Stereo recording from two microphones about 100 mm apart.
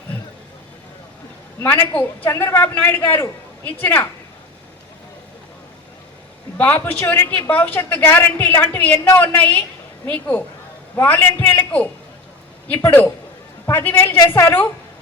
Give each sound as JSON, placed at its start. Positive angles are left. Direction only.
{"t": 1.6, "sound": "a man's voice", "side_deg": 20}
{"t": 6.6, "sound": "a woman's voice", "side_deg": 20}